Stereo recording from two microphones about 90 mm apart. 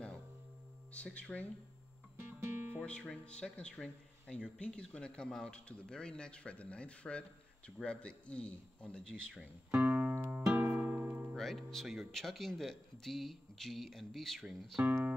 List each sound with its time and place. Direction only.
0.9 s speech: 10° left (ahead or behind)
2.2 s music: 25° right (ahead or behind)
2.8 s speech: 10° left (ahead or behind)
9.8 s music: 15° right (ahead or behind)
11.3 s speech: 5° left (ahead or behind)